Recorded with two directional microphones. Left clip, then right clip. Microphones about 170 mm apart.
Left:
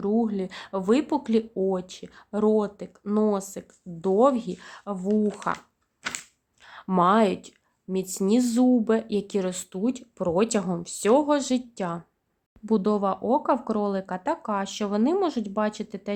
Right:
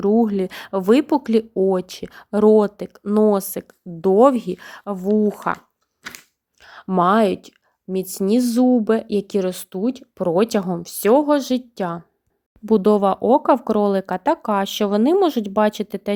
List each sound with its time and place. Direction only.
0.0 s speech: 40° right (ahead or behind)
6.6 s speech: 30° right (ahead or behind)